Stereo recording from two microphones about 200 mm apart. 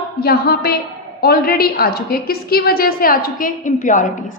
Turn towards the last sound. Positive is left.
turn(degrees=40)  # may be behind; listen again after turning